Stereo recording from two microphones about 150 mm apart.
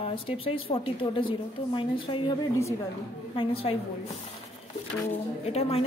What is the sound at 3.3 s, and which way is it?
Speech, 40° left (ahead or behind).